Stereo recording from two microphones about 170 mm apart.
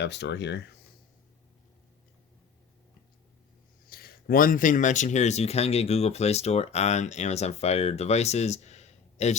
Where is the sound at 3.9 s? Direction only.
60° left (ahead or behind).